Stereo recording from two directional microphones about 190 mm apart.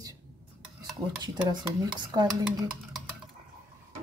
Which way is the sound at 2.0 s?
20° right (ahead or behind).